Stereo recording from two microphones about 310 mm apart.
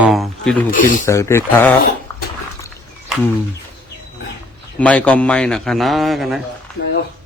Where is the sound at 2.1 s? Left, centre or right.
Centre.